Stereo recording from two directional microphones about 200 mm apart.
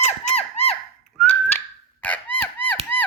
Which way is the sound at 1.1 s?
5° left (ahead or behind).